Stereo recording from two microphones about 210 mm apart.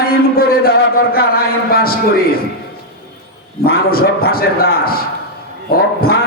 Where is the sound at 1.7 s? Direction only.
45° left (ahead or behind).